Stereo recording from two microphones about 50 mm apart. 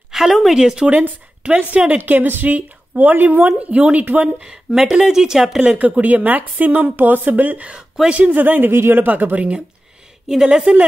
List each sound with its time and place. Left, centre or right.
0.1 s speech: centre
0.6 s speech: centre
0.8 s a woman's voice: right
2.0 s speech: right
4.6 s speech: centre
5.6 s speech: right
9.0 s speech: right
10.2 s a woman's voice: centre
10.5 s a woman's voice: right